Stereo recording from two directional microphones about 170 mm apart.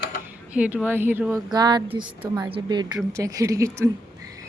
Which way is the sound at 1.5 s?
25° right (ahead or behind).